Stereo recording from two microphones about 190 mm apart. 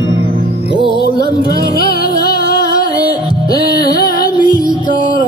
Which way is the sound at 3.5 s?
20° left (ahead or behind).